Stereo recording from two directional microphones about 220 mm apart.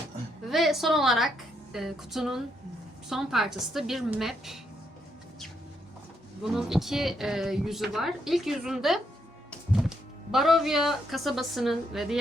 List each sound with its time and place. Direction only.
0.5 s speech: centre (ahead or behind)
6.4 s speech: centre (ahead or behind)